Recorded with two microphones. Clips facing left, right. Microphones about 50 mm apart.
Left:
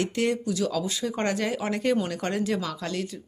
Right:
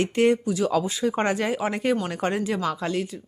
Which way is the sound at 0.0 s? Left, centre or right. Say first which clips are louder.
Right 5 dB; right.